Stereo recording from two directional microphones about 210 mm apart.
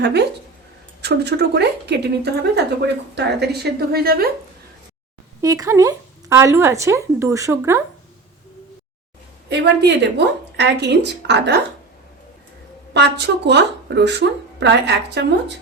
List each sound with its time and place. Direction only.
0.0 s speech: 50° right (ahead or behind)
5.4 s speech: 15° right (ahead or behind)
9.5 s speech: 55° right (ahead or behind)
12.9 s a woman's voice: 55° right (ahead or behind)